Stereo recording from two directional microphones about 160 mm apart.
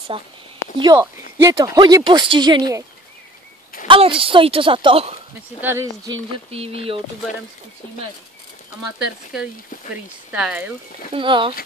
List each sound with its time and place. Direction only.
0.1 s speech: 35° right (ahead or behind)
3.8 s speech: 35° right (ahead or behind)
5.6 s speech: 15° right (ahead or behind)
6.0 s speech: 35° right (ahead or behind)
10.3 s speech: 10° right (ahead or behind)
11.1 s speech: 30° right (ahead or behind)